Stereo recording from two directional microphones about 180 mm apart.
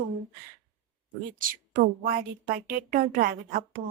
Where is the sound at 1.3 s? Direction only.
50° right (ahead or behind).